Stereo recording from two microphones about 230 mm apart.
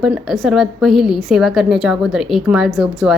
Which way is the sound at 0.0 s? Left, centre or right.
Centre.